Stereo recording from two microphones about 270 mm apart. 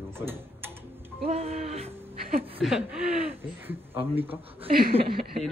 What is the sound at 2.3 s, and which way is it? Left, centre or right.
Speech, right.